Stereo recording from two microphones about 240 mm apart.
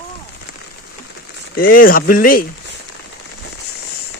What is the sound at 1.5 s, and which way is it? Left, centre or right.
Speech, left.